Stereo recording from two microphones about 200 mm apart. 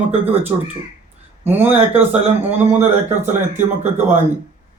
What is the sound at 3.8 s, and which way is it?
Speech, 35° right (ahead or behind).